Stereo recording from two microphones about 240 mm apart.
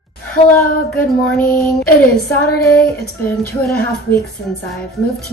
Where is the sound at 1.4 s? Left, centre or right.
Left.